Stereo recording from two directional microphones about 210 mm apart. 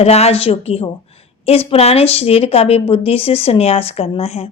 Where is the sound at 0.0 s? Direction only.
30° left (ahead or behind).